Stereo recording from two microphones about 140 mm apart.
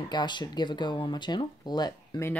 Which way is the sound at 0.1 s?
30° left (ahead or behind).